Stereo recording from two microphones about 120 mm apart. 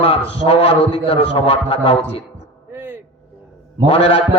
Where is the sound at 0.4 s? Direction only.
50° left (ahead or behind).